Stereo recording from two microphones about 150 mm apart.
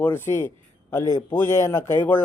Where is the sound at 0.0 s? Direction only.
15° left (ahead or behind).